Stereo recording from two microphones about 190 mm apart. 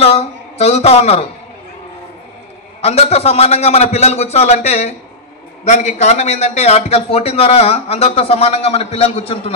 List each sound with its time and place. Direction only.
0.0 s speech: 35° left (ahead or behind)
2.8 s a man's voice: 35° left (ahead or behind)